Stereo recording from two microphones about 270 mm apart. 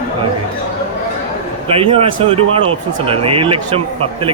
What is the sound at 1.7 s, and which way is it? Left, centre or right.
Speech, right.